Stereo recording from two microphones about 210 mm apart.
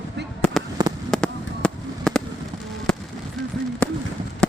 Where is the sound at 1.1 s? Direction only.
5° left (ahead or behind).